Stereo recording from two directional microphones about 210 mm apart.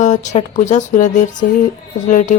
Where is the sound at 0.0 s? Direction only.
35° left (ahead or behind).